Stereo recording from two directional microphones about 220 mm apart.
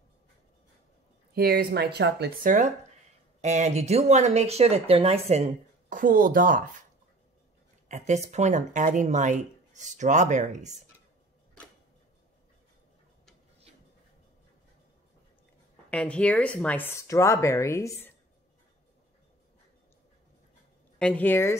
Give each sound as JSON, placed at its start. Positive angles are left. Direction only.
{"t": 1.3, "sound": "speech", "side_deg": -45}
{"t": 7.9, "sound": "speech", "side_deg": -30}
{"t": 15.9, "sound": "speech", "side_deg": 5}
{"t": 21.0, "sound": "speech", "side_deg": 5}